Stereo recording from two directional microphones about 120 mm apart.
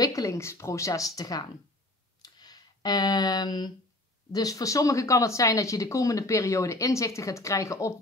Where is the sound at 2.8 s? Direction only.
30° left (ahead or behind).